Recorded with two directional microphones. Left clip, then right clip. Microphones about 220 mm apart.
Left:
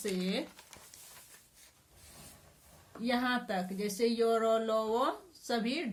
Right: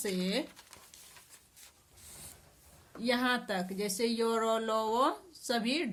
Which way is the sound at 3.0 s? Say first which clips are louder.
Right 2 dB; 50° right (ahead or behind).